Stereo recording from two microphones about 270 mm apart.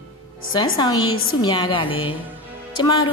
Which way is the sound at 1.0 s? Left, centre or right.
Left.